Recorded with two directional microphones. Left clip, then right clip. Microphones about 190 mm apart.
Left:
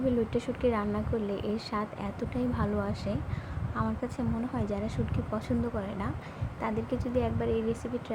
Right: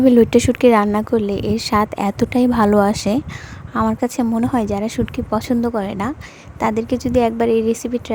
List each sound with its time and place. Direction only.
0.0 s a woman's voice: 65° right (ahead or behind)